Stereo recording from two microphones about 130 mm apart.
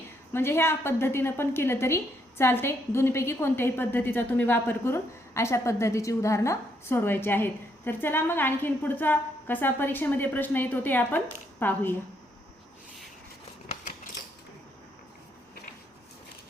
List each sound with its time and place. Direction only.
0.3 s a woman's voice: 20° left (ahead or behind)